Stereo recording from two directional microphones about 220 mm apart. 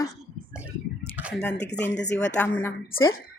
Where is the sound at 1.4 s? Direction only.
50° left (ahead or behind).